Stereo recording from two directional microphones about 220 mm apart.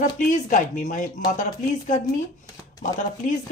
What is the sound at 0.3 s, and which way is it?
Speech, 35° left (ahead or behind).